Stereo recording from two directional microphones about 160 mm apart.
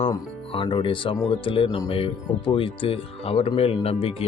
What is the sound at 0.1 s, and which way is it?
Speech, 35° left (ahead or behind).